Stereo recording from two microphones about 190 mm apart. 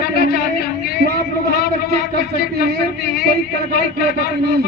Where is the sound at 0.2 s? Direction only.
55° left (ahead or behind).